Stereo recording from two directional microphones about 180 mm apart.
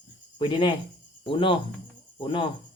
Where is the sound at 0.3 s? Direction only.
25° left (ahead or behind).